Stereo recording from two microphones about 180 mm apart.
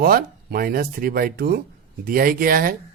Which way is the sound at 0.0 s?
55° right (ahead or behind).